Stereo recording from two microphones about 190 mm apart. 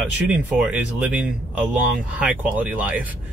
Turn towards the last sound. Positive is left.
turn(degrees=-10)  # may be behind; listen again after turning